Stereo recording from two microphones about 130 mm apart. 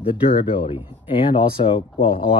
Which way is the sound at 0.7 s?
45° left (ahead or behind).